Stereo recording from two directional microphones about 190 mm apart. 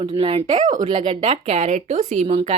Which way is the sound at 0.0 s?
25° right (ahead or behind).